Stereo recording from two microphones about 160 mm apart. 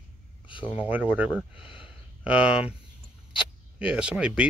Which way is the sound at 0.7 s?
10° right (ahead or behind).